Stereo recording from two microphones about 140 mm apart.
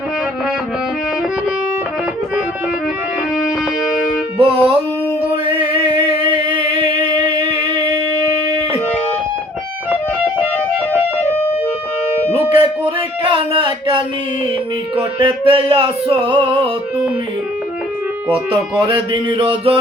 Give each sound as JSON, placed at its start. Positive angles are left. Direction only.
{"t": 4.4, "sound": "music", "side_deg": -40}
{"t": 9.9, "sound": "music", "side_deg": -10}
{"t": 13.5, "sound": "a sound", "side_deg": -40}
{"t": 15.2, "sound": "music", "side_deg": -35}
{"t": 18.9, "sound": "music", "side_deg": -35}